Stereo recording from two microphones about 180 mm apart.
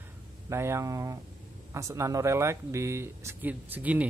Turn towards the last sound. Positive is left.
turn(degrees=-10)  # may be behind; listen again after turning